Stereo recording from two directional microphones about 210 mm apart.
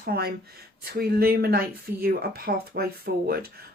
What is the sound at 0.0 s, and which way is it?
Speech, 50° right (ahead or behind).